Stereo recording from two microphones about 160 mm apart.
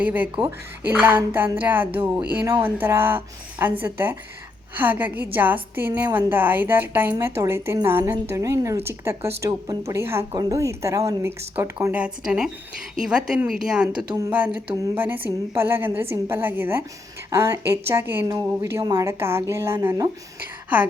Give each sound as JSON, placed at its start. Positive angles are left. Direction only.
{"t": 0.0, "sound": "a woman's voice", "side_deg": -10}